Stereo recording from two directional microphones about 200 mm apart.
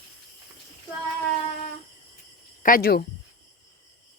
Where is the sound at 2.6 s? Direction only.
45° left (ahead or behind).